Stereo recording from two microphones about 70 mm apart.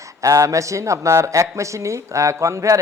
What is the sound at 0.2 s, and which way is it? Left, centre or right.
A man's voice, right.